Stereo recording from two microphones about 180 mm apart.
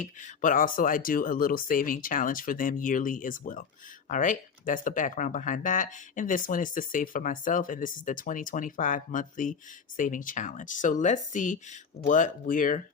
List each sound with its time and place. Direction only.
0.0 s speech: 45° left (ahead or behind)